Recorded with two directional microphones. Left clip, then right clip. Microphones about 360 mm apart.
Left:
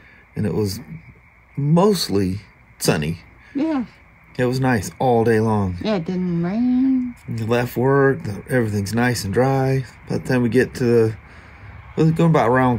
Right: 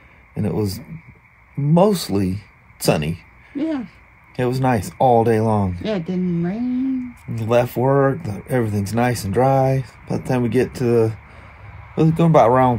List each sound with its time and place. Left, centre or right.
0.3 s speech: centre
3.5 s speech: centre
4.4 s speech: centre
5.9 s speech: centre
7.3 s speech: centre